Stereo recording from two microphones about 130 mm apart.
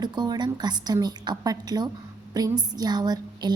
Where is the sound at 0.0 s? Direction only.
30° right (ahead or behind).